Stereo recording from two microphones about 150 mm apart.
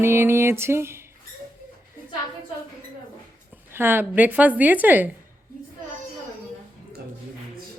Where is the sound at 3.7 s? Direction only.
15° right (ahead or behind).